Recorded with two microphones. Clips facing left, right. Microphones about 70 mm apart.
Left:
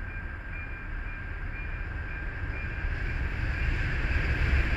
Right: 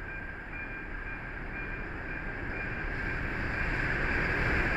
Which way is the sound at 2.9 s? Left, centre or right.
Right.